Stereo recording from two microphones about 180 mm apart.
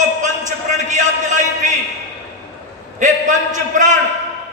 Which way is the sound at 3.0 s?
40° right (ahead or behind).